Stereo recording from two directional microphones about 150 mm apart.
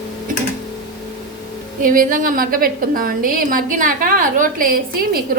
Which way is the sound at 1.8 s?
65° right (ahead or behind).